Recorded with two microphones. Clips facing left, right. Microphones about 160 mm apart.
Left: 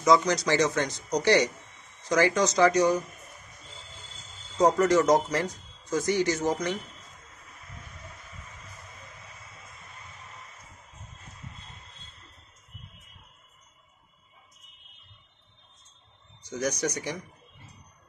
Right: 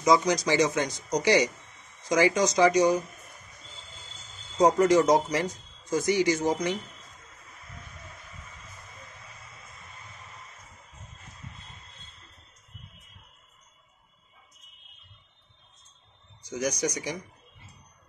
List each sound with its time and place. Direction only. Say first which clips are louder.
0.0 s a man's voice: even; 15° right (ahead or behind)
4.6 s a man's voice: right 1 dB; 15° right (ahead or behind)
16.4 s a man's voice: even; 10° right (ahead or behind)